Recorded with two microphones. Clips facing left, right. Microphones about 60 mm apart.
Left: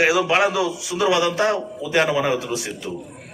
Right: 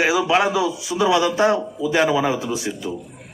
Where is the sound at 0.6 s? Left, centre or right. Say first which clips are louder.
Right 1 dB; left.